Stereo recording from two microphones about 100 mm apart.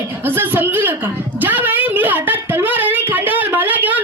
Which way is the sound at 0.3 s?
20° right (ahead or behind).